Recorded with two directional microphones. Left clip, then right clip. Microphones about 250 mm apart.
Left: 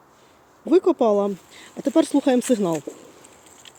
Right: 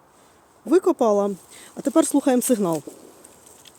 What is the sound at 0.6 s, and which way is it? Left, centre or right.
Speech, centre.